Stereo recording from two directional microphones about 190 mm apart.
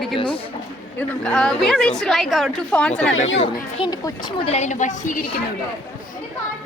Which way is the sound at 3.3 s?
30° left (ahead or behind).